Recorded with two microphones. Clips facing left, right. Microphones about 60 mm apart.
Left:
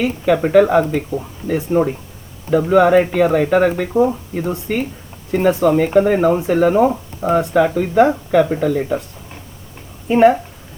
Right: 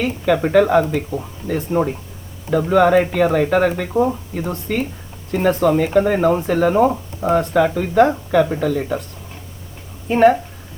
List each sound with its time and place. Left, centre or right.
0.0 s speech: centre
10.1 s speech: centre